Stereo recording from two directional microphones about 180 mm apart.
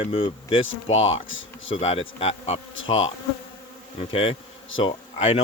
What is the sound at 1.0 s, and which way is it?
Speech, 90° left.